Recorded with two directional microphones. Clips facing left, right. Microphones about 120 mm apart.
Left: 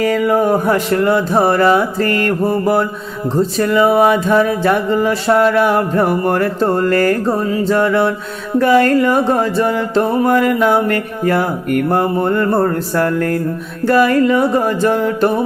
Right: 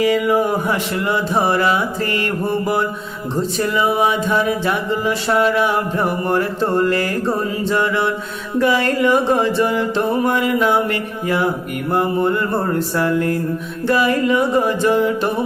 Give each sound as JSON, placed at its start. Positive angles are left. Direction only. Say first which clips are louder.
{"t": 0.0, "sound": "music", "louder": "left 2 dB", "side_deg": 45}